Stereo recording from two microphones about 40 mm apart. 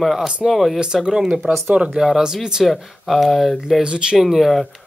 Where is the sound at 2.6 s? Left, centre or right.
Centre.